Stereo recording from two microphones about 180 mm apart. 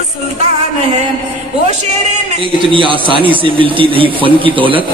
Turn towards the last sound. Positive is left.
turn(degrees=-30)  # may be behind; listen again after turning